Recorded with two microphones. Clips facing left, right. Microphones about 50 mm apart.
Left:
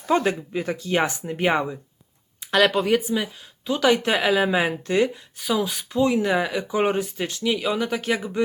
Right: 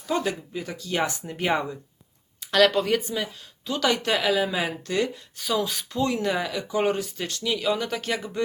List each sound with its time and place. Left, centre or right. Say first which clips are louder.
0.0 s speech: left 5 dB; left
1.2 s speech: left 3 dB; centre